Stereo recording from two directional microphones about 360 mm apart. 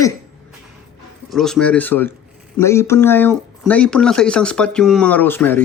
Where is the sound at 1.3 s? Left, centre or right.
Centre.